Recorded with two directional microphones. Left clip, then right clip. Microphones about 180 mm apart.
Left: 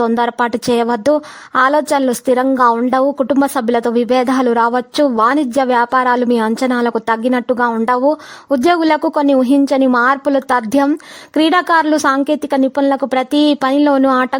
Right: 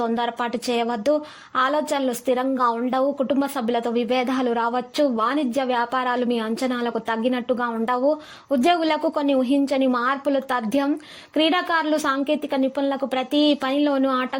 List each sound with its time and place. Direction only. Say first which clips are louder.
0.0 s speech: left 9 dB; 45° left (ahead or behind)